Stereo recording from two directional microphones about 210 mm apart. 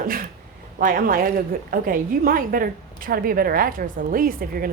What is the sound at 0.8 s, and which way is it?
A woman's voice, 40° right (ahead or behind).